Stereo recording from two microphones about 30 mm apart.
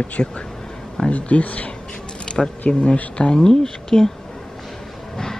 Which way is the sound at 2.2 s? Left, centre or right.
Left.